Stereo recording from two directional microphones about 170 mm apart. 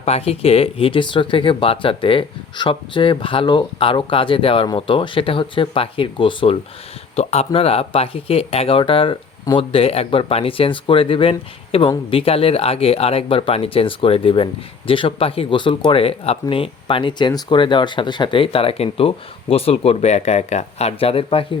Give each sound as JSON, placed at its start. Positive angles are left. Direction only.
{"t": 0.0, "sound": "speech", "side_deg": 35}